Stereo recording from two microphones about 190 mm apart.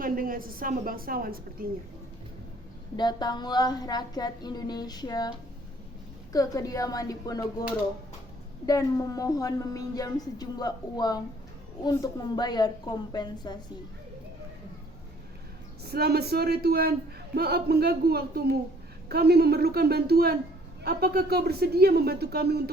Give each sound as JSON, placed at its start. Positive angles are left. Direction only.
{"t": 0.0, "sound": "a woman's voice", "side_deg": -50}
{"t": 2.9, "sound": "a woman's voice", "side_deg": 20}
{"t": 6.3, "sound": "a woman's voice", "side_deg": 20}
{"t": 8.6, "sound": "a woman's voice", "side_deg": 20}
{"t": 15.8, "sound": "speech", "side_deg": -55}